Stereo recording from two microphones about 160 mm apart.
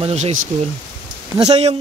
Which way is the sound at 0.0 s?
45° right (ahead or behind).